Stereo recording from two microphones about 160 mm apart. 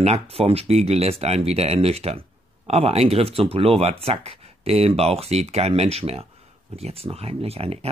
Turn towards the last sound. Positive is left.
turn(degrees=-40)  # may be behind; listen again after turning